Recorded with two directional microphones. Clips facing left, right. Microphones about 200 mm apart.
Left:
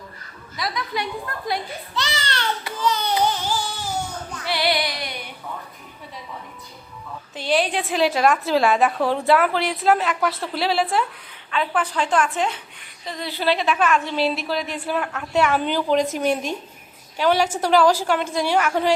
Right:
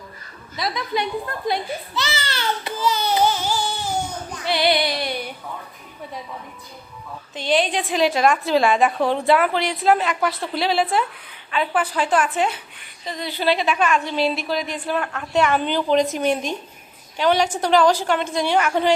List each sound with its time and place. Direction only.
0.5 s a woman's voice: 25° right (ahead or behind)
2.0 s speech: 5° right (ahead or behind)
2.8 s a sound: 5° right (ahead or behind)
4.4 s music: 20° right (ahead or behind)
7.3 s a woman's voice: 5° left (ahead or behind)